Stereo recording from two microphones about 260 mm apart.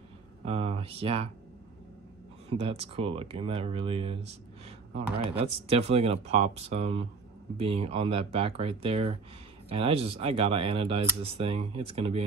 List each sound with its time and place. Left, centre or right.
0.5 s speech: right
2.5 s speech: right
5.4 s speech: right